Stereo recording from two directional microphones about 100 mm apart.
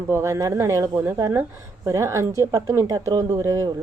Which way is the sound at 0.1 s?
30° right (ahead or behind).